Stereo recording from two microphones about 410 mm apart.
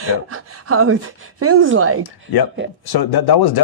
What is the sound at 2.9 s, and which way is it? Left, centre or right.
Speech, left.